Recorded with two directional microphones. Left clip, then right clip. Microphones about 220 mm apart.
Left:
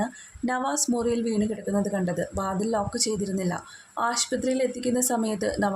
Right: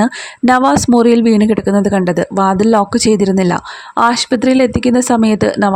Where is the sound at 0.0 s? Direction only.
45° right (ahead or behind).